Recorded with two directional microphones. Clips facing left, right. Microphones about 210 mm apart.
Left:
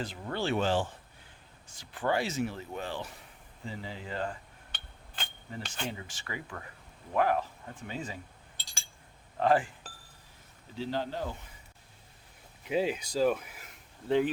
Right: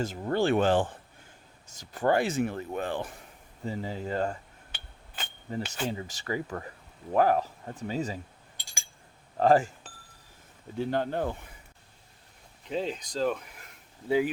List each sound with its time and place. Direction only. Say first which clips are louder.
0.0 s speech: right 7 dB; 45° right (ahead or behind)
1.6 s speech: right 5 dB; 40° right (ahead or behind)
3.6 s speech: right 7 dB; 40° right (ahead or behind)
4.7 s a sound: right 2 dB; 5° right (ahead or behind)
5.6 s speech: right 3 dB; 5° right (ahead or behind)
5.9 s speech: right 8 dB; 40° right (ahead or behind)
8.5 s a sound: right 2 dB; 15° right (ahead or behind)
9.4 s speech: right 4 dB; 40° right (ahead or behind)
10.8 s speech: right 5 dB; 55° right (ahead or behind)
12.6 s speech: left 2 dB; 10° left (ahead or behind)